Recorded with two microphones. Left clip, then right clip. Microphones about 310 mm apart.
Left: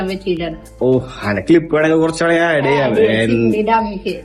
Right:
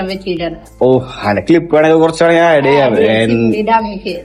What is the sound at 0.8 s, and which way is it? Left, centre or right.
Speech, centre.